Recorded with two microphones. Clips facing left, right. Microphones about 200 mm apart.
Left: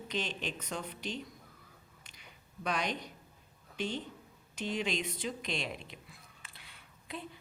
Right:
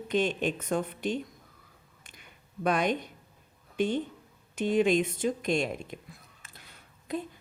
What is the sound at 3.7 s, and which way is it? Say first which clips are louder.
A woman's voice: right 9 dB; 50° right (ahead or behind).